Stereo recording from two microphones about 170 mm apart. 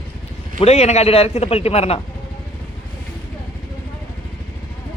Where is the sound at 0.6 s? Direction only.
40° left (ahead or behind).